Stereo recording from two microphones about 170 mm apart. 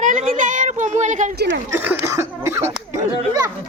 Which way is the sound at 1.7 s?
10° right (ahead or behind).